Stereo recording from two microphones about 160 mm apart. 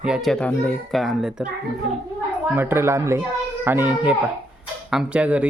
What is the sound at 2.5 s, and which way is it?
A woman's voice, 15° right (ahead or behind).